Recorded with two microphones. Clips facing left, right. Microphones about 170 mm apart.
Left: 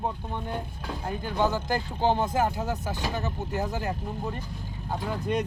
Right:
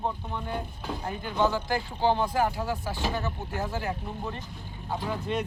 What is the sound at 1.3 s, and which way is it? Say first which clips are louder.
Speech: even; 15° left (ahead or behind).